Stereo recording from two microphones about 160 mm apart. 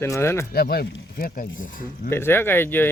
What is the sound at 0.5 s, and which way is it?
Speech, 75° left (ahead or behind).